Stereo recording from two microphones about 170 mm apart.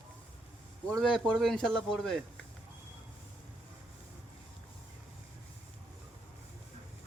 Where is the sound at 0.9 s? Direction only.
Centre (ahead or behind).